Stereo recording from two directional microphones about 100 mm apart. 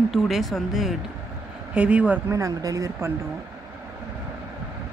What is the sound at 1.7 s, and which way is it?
Speech, 10° right (ahead or behind).